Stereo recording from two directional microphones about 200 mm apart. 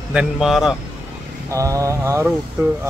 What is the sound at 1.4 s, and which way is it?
Mantra, 15° right (ahead or behind).